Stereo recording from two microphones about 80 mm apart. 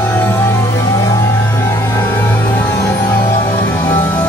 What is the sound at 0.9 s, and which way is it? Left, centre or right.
Music, left.